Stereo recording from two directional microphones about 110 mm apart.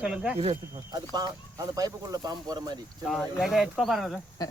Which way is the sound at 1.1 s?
35° right (ahead or behind).